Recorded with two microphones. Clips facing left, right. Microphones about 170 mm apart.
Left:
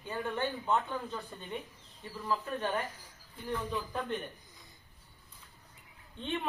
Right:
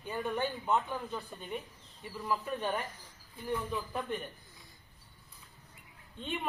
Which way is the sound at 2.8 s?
10° left (ahead or behind).